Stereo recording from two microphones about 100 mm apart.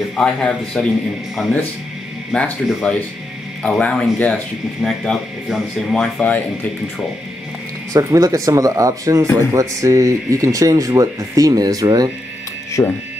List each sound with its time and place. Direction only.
0.1 s a man's voice: 5° left (ahead or behind)
7.9 s speech: 35° right (ahead or behind)
12.8 s speech: 25° left (ahead or behind)